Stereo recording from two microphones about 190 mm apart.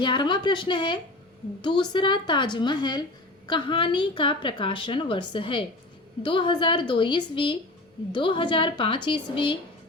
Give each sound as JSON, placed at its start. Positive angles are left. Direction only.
{"t": 0.0, "sound": "a woman's voice", "side_deg": 25}